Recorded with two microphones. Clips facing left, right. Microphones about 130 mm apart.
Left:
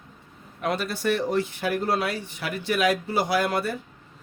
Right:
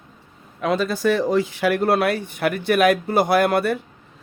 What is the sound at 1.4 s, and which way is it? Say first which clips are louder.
Speech: right 6 dB; 90° right.